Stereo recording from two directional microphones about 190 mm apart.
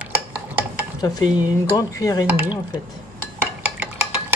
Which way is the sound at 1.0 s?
20° left (ahead or behind).